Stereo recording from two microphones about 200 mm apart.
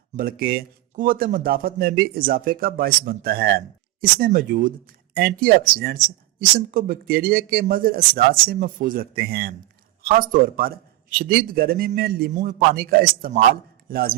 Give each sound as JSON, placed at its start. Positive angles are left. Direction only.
{"t": 0.2, "sound": "speech", "side_deg": -45}